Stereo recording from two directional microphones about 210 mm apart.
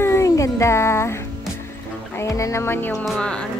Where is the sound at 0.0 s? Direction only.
15° left (ahead or behind).